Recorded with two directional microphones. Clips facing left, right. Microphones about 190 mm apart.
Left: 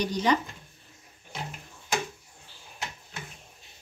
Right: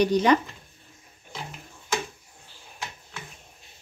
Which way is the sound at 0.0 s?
60° right (ahead or behind).